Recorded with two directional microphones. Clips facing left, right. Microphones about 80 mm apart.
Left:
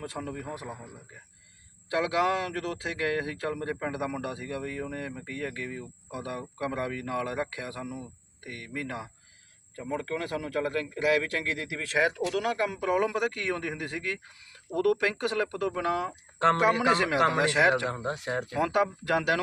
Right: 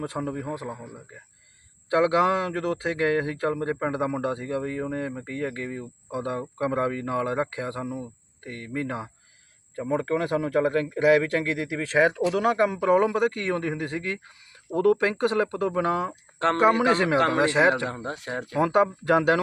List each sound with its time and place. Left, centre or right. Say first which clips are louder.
0.0 s a man's voice: right 6 dB; right
17.2 s speech: right 2 dB; centre
17.4 s a man's voice: right 3 dB; right
17.8 s speech: even; left
18.6 s a man's voice: right 6 dB; right